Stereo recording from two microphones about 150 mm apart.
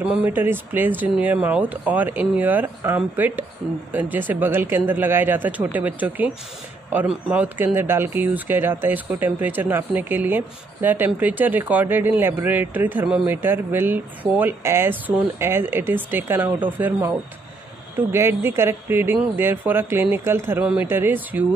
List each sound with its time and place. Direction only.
0.0 s speech: 10° right (ahead or behind)